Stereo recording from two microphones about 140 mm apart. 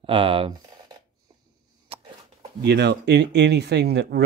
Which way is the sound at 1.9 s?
45° right (ahead or behind).